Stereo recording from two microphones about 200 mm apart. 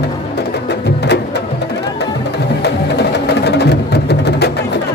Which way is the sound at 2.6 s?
55° left (ahead or behind).